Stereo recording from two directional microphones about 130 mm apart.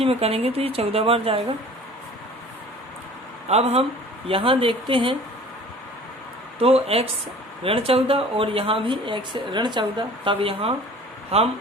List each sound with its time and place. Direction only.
0.0 s speech: 50° right (ahead or behind)
3.5 s speech: 50° right (ahead or behind)
6.6 s speech: 50° right (ahead or behind)